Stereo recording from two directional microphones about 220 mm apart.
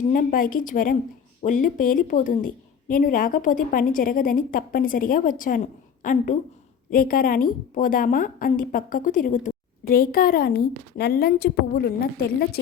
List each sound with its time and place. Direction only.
0.1 s a woman's voice: 40° left (ahead or behind)